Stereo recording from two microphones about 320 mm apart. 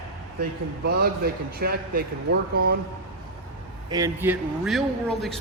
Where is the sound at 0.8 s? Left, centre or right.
Right.